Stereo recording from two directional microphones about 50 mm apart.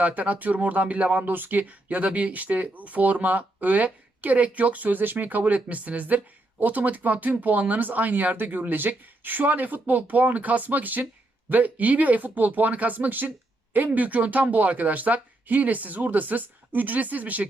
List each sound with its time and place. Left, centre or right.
0.0 s speech: right
1.2 s speech: right